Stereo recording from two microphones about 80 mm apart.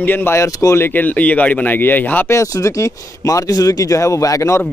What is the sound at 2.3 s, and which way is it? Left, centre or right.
Speech, left.